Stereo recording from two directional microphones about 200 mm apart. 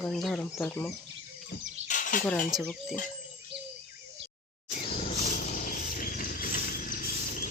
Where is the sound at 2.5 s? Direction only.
Centre (ahead or behind).